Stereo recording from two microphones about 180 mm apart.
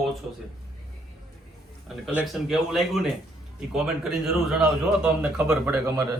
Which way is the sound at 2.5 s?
Centre (ahead or behind).